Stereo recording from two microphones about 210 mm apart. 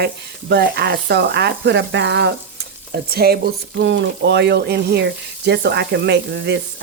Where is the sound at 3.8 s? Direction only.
60° right (ahead or behind).